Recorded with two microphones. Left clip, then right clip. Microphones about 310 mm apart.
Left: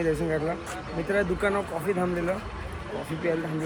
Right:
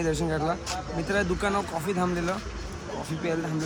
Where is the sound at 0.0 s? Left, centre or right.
Centre.